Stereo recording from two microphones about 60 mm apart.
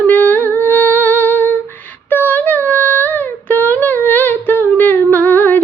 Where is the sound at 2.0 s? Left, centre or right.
Left.